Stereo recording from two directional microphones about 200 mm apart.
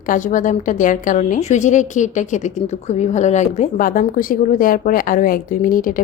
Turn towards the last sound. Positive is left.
turn(degrees=45)  # may be behind; listen again after turning